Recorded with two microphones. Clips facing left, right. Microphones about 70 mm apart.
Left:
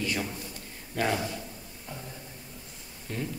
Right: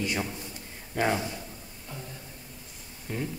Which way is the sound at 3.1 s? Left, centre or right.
Centre.